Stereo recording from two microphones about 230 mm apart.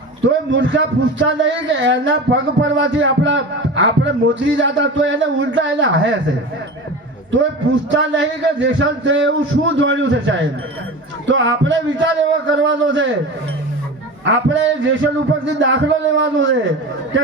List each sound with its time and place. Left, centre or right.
0.3 s speech: right
7.9 s speech: right
14.3 s speech: right